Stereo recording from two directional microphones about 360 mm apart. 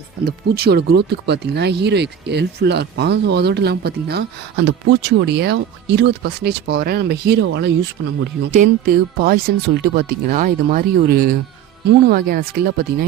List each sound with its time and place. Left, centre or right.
0.3 s speech: right